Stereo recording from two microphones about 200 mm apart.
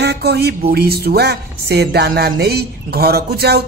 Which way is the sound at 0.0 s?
55° right (ahead or behind).